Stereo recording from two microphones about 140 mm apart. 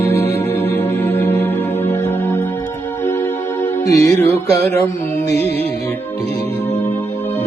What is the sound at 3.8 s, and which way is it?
Music, 25° left (ahead or behind).